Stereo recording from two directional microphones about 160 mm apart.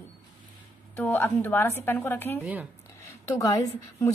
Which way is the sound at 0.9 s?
15° left (ahead or behind).